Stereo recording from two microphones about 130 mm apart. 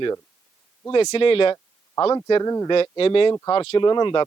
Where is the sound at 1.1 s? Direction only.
45° left (ahead or behind); by 2.7 s 25° left (ahead or behind).